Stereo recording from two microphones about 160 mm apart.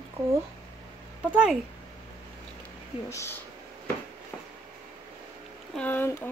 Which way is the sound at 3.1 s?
20° left (ahead or behind).